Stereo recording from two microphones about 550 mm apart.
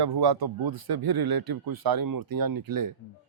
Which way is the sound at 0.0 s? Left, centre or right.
Right.